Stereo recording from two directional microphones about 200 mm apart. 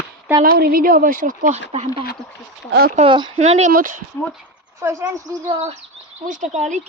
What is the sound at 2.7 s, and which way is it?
Speech, 50° right (ahead or behind).